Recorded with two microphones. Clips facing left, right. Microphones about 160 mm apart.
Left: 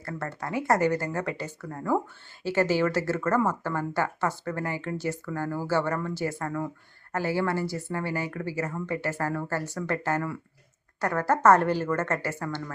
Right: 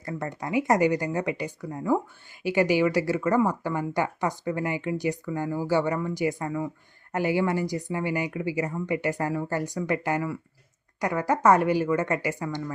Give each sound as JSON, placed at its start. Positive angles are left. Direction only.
{"t": 0.0, "sound": "speech", "side_deg": -15}